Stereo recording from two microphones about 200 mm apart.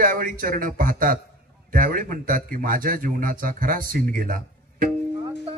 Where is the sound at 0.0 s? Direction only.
45° right (ahead or behind).